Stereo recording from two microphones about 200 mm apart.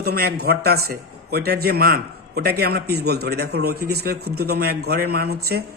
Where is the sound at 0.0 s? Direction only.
50° right (ahead or behind).